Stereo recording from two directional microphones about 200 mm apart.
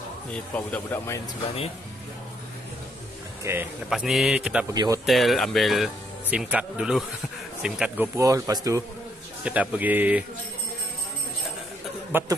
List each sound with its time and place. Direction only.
0.3 s speech: 5° left (ahead or behind)
3.4 s speech: 5° right (ahead or behind)
4.7 s speech: 20° right (ahead or behind)
5.0 s speech: centre (ahead or behind)
8.2 s speech: 15° right (ahead or behind)
9.4 s speech: 5° right (ahead or behind)
12.1 s speech: 10° right (ahead or behind)